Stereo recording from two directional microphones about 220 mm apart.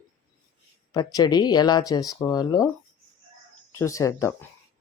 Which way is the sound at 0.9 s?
15° left (ahead or behind).